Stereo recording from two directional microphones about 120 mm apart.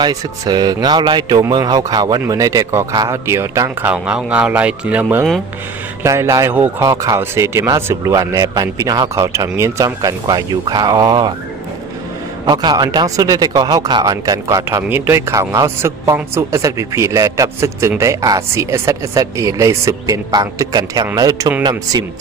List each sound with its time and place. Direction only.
0.0 s a man's voice: 35° right (ahead or behind)
3.8 s speech: 10° right (ahead or behind)
6.0 s speech: 25° right (ahead or behind)
12.4 s a man's voice: 35° right (ahead or behind)